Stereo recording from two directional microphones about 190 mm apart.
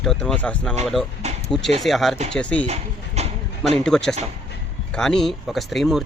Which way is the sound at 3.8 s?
5° left (ahead or behind).